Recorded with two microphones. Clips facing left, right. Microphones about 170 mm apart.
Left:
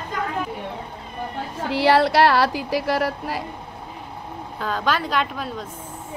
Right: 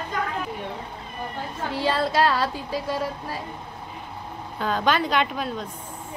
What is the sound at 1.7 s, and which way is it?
A woman's voice, 80° left.